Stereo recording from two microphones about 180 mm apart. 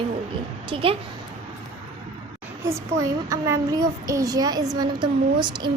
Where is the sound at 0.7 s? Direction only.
30° right (ahead or behind).